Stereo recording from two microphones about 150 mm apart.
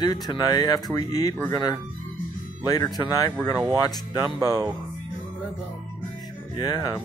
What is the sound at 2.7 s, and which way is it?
Speech, 25° left (ahead or behind).